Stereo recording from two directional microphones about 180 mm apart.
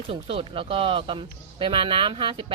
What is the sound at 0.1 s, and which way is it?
Speech, 30° right (ahead or behind).